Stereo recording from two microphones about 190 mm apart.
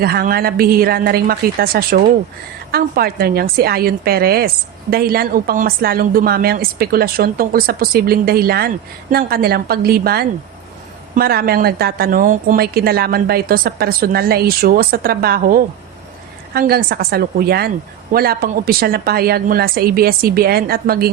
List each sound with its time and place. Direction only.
0.0 s a woman's voice: 50° right (ahead or behind)